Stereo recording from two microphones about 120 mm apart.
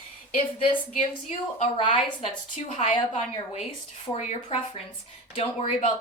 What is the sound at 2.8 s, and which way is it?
Speech, 70° left (ahead or behind).